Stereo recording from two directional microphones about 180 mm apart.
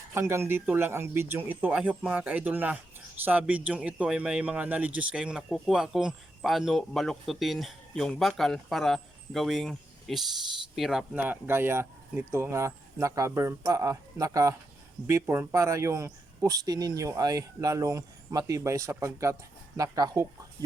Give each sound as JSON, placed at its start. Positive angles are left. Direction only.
{"t": 0.1, "sound": "speech", "side_deg": -15}